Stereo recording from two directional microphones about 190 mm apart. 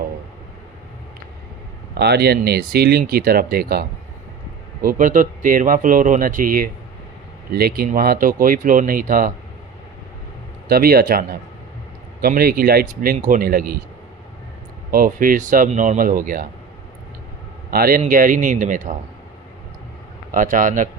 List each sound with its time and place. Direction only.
2.0 s speech: 60° right (ahead or behind)
10.7 s speech: 50° right (ahead or behind)
14.8 s speech: 50° right (ahead or behind)
17.7 s a man's voice: 50° right (ahead or behind)
20.3 s speech: 45° right (ahead or behind)